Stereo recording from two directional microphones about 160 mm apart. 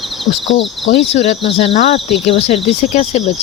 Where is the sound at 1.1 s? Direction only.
40° left (ahead or behind).